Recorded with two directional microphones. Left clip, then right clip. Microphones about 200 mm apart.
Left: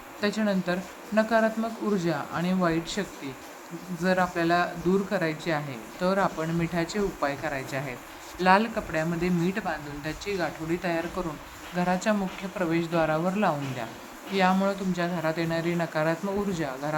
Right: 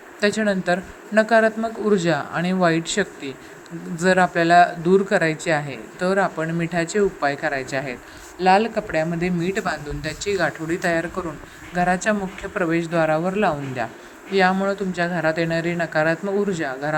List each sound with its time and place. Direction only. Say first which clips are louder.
0.2 s speech: right 7 dB; 20° right (ahead or behind)